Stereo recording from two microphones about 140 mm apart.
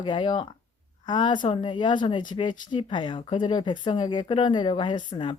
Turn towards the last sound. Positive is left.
turn(degrees=35)  # may be behind; listen again after turning